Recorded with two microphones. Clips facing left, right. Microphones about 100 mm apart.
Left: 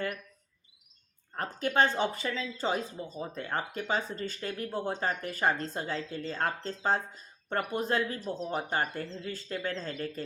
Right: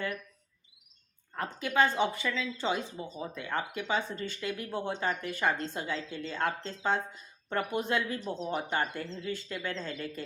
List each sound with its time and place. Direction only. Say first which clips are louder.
1.4 s speech: left 1 dB; 40° left (ahead or behind)